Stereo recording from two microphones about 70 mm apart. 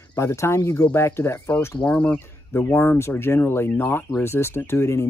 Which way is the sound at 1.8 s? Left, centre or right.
Centre.